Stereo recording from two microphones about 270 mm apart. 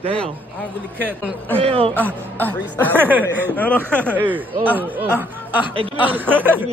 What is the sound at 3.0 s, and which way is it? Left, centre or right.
Speech, centre.